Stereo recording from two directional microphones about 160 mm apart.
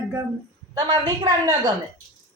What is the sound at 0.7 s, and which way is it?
A woman's voice, 25° right (ahead or behind).